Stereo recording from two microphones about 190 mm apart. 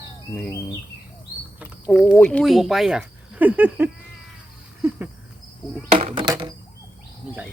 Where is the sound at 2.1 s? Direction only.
10° left (ahead or behind).